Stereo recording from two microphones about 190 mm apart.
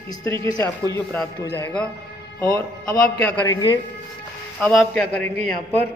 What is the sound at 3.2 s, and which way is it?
Speech, 10° left (ahead or behind).